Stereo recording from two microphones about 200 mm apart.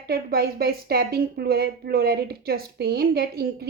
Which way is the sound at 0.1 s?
50° right (ahead or behind).